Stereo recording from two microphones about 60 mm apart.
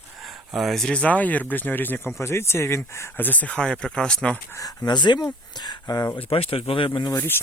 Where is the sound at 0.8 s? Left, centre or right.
Centre; by 2.1 s left.